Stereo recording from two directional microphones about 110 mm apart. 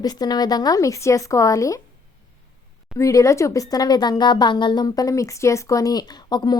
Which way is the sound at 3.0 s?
30° left (ahead or behind).